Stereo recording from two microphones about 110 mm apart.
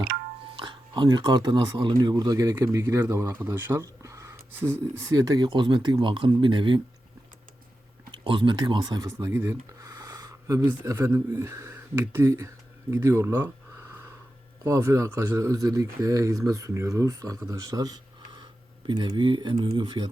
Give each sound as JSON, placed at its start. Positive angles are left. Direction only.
{"t": 0.5, "sound": "speech", "side_deg": -45}
{"t": 8.1, "sound": "speech", "side_deg": -50}
{"t": 9.1, "sound": "speech", "side_deg": -25}